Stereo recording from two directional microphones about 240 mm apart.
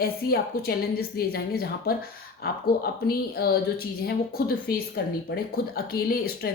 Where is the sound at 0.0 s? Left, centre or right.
Left.